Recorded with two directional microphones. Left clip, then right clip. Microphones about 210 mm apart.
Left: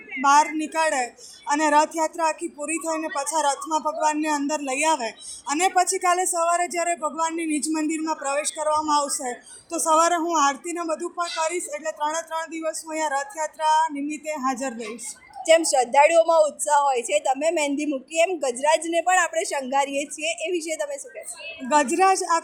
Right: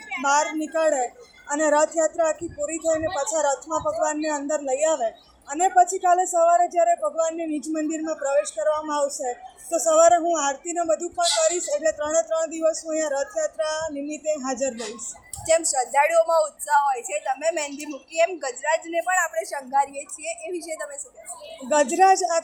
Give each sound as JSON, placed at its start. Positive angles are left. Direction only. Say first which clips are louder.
{"t": 0.2, "sound": "speech", "louder": "left 4 dB", "side_deg": 50}
{"t": 15.4, "sound": "a woman's voice", "louder": "left 4 dB", "side_deg": 30}
{"t": 21.7, "sound": "speech", "louder": "right 2 dB", "side_deg": 45}